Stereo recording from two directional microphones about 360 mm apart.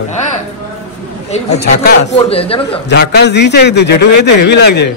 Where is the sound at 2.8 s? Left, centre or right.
Left.